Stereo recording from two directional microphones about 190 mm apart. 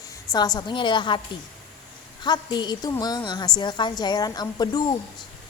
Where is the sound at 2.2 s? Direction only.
20° left (ahead or behind).